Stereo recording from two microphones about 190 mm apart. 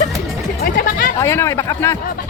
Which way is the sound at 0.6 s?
50° left (ahead or behind).